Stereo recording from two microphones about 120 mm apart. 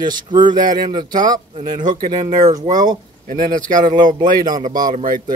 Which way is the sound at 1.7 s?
90° right.